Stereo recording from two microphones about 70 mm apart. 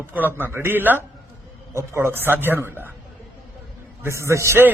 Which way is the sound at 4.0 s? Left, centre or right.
Right.